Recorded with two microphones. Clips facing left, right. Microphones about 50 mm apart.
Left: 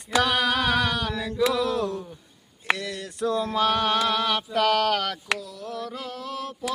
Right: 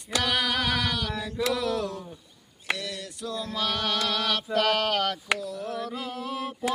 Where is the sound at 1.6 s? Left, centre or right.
Left.